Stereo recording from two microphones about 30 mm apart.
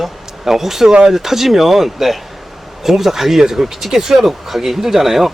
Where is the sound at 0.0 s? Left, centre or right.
Centre.